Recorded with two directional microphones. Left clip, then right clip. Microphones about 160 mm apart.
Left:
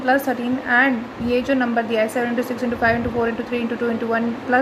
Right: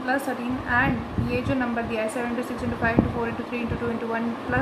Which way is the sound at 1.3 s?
45° left (ahead or behind).